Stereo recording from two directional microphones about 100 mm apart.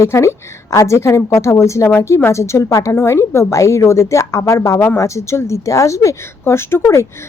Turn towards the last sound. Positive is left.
turn(degrees=25)  # may be behind; listen again after turning